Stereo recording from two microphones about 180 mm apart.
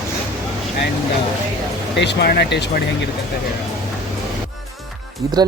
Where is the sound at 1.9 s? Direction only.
70° left (ahead or behind).